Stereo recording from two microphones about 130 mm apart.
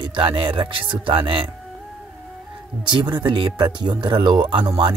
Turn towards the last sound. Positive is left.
turn(degrees=-40)  # may be behind; listen again after turning